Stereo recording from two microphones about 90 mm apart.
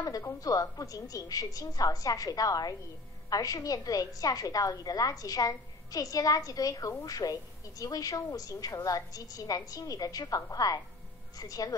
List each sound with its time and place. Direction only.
0.0 s music: 45° left (ahead or behind)
0.4 s a woman's voice: 40° left (ahead or behind)